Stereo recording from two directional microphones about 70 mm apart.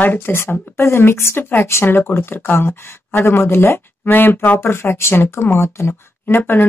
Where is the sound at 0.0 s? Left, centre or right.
Left.